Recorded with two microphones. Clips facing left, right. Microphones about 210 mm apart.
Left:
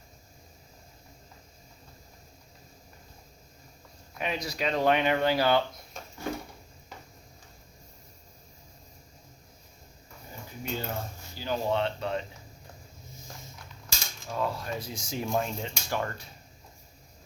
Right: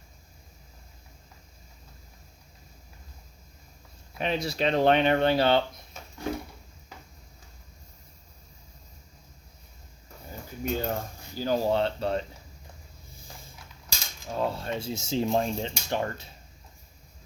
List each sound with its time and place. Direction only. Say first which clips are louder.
4.2 s speech: right 4 dB; 30° right (ahead or behind)
10.6 s a sound: right 5 dB; 45° right (ahead or behind)
14.3 s speech: right 2 dB; 30° right (ahead or behind)